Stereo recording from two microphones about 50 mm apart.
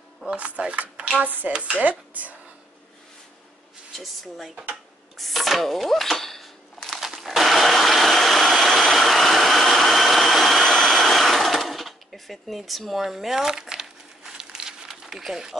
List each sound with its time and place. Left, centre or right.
0.4 s speech: right
1.2 s speech: right
3.9 s speech: centre
5.1 s a sound: centre